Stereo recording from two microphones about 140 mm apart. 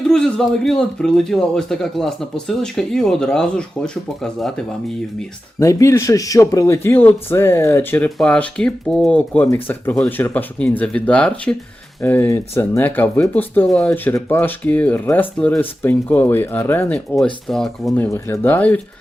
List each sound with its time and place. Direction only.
0.1 s a man's voice: 5° left (ahead or behind)
5.5 s speech: 20° left (ahead or behind)
17.2 s a man's voice: 5° left (ahead or behind)
17.9 s speech: 15° left (ahead or behind)